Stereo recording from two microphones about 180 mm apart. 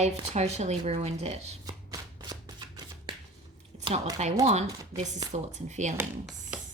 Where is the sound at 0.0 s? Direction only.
35° right (ahead or behind).